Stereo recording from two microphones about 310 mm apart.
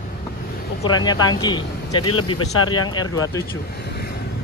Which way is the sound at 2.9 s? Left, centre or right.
Centre.